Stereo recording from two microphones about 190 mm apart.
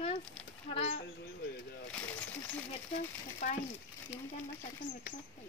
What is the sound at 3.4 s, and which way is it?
Speech, 40° left (ahead or behind).